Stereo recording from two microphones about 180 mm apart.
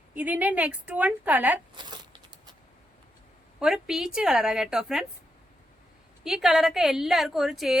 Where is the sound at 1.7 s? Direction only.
25° right (ahead or behind).